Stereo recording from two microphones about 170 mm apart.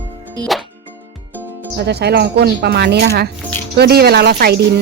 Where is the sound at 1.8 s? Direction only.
75° right (ahead or behind).